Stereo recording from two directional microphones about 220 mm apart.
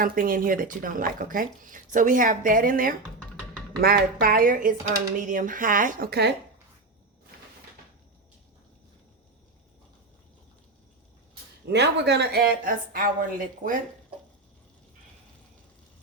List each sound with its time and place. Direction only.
0.0 s speech: 40° right (ahead or behind)
11.7 s speech: 50° right (ahead or behind)